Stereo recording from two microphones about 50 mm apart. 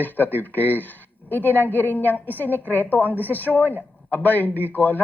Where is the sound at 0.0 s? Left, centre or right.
Left.